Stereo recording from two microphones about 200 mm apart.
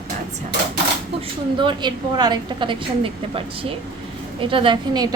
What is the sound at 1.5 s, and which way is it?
A woman's voice, 25° right (ahead or behind).